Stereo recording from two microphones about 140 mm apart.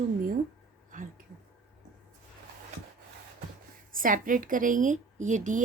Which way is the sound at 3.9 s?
80° right.